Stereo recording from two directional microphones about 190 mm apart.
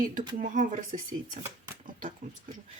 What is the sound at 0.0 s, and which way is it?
Speech, 45° right (ahead or behind).